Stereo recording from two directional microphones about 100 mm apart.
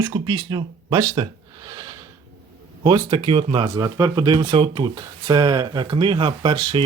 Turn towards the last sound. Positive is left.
turn(degrees=-45)  # may be behind; listen again after turning